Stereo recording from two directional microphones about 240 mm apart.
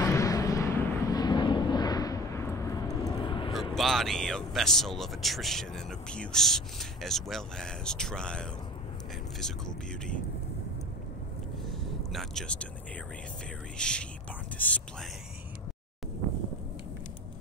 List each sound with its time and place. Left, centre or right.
0.0 s vehicle: centre
3.7 s speech: centre
12.1 s speech: centre
13.7 s speech: centre